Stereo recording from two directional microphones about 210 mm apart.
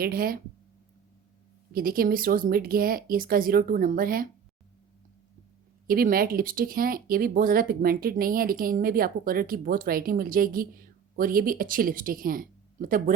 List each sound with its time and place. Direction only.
0.0 s speech: 45° right (ahead or behind)
1.7 s speech: 45° right (ahead or behind)
5.9 s speech: 45° right (ahead or behind)